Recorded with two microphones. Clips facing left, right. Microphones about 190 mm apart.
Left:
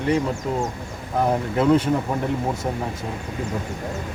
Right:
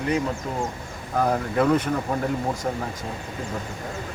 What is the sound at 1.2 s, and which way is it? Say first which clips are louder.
Speech: left 1 dB; 25° left (ahead or behind).